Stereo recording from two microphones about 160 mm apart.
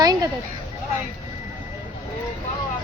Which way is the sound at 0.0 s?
25° right (ahead or behind).